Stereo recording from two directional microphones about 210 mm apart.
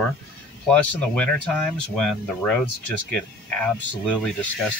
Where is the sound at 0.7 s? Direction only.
5° left (ahead or behind).